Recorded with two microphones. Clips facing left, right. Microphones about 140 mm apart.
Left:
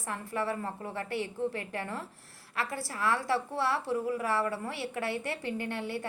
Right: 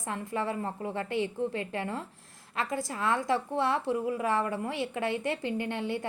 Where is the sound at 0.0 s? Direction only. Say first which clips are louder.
Right 1 dB; 20° right (ahead or behind).